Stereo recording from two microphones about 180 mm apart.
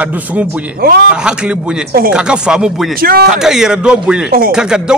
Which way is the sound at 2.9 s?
55° right (ahead or behind).